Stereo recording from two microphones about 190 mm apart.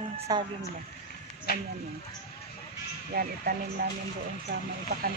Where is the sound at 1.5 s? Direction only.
55° left (ahead or behind).